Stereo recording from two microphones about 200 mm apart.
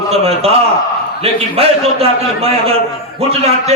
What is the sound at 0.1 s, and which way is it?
A man's voice, 30° right (ahead or behind).